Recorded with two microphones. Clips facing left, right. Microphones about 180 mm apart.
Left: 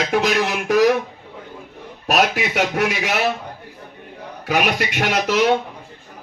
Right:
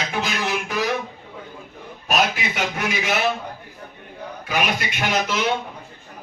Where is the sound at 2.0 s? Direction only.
70° left (ahead or behind).